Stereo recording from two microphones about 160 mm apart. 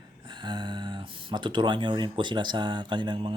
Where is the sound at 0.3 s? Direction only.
30° right (ahead or behind).